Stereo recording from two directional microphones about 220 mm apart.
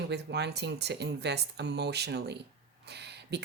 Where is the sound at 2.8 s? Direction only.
50° right (ahead or behind).